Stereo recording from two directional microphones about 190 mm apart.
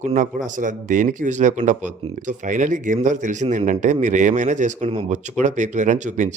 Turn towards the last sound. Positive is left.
turn(degrees=-40)  # may be behind; listen again after turning